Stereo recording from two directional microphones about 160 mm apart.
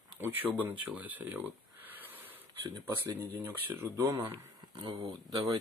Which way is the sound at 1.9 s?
10° right (ahead or behind).